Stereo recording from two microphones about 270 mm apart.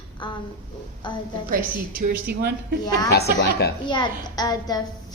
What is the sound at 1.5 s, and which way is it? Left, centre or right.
Speech, right.